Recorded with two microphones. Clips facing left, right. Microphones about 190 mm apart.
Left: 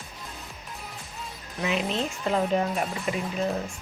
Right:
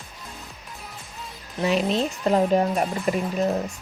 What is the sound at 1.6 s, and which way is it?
Speech, 35° right (ahead or behind).